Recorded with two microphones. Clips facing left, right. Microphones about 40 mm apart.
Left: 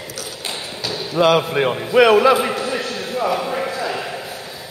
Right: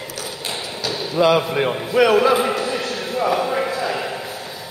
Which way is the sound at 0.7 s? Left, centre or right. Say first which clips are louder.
Right 1 dB; centre.